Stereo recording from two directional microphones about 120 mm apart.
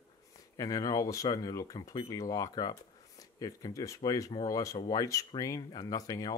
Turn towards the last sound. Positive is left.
turn(degrees=30)  # may be behind; listen again after turning